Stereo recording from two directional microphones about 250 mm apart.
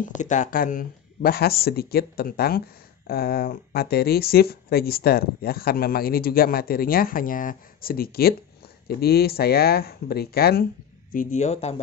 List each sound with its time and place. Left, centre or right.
0.0 s speech: left